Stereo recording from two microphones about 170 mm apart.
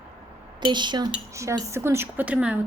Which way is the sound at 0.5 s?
25° right (ahead or behind).